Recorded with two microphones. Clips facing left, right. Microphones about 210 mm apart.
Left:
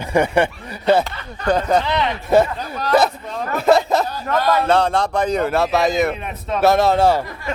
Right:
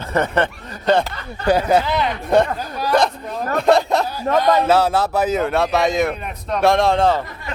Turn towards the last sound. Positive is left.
turn(degrees=10)  # may be behind; listen again after turning